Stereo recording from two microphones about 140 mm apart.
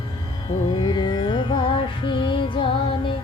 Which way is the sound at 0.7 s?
35° left (ahead or behind).